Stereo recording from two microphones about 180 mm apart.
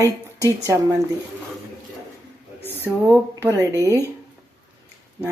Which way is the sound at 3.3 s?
20° right (ahead or behind).